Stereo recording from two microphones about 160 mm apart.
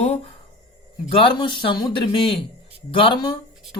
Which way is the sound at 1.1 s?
30° left (ahead or behind).